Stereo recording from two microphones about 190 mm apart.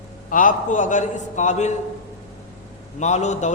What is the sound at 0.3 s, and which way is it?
A man's voice, 45° left (ahead or behind).